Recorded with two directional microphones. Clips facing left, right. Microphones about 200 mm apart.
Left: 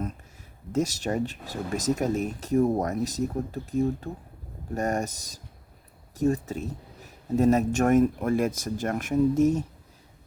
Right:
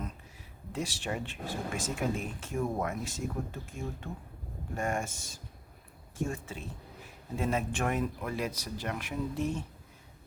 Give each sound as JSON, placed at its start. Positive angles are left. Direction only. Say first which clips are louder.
{"t": 0.7, "sound": "speech", "louder": "left 9 dB", "side_deg": 40}